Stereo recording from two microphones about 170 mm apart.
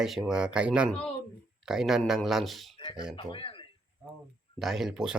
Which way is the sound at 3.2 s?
30° left (ahead or behind).